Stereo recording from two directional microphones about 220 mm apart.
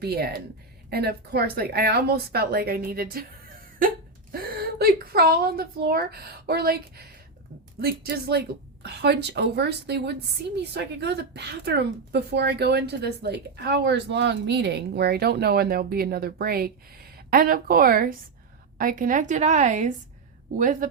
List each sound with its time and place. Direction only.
0.0 s a woman's voice: 45° right (ahead or behind)
4.3 s a woman's voice: 45° right (ahead or behind)